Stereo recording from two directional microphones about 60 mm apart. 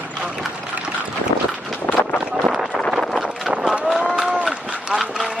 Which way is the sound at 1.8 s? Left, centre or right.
Left.